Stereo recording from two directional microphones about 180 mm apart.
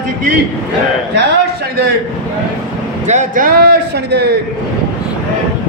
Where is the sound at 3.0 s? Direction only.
45° right (ahead or behind); by 4.3 s 65° right (ahead or behind).